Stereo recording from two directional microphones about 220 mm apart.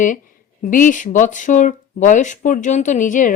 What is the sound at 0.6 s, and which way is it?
Speech, 35° left (ahead or behind).